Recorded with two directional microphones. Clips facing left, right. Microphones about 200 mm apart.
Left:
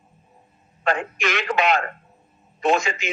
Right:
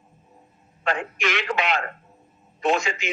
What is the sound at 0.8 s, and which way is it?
A man's voice, 45° left (ahead or behind).